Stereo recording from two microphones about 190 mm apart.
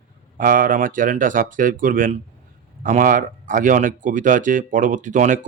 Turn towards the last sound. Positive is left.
turn(degrees=-40)  # may be behind; listen again after turning